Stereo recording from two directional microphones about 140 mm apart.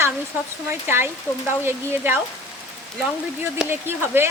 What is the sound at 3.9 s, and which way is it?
Speech, 15° right (ahead or behind).